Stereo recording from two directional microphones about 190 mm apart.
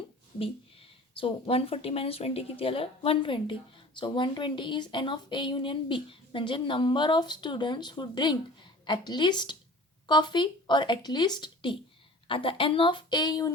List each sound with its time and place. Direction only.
0.3 s speech: 30° left (ahead or behind)